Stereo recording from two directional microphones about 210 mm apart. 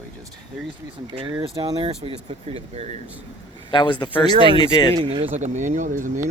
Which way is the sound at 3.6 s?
20° left (ahead or behind).